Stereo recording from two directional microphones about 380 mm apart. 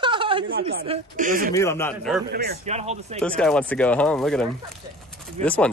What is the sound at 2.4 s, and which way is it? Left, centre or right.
Speech, right.